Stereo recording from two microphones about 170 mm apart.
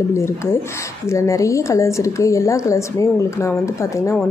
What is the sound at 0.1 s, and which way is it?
A woman's voice, 15° left (ahead or behind).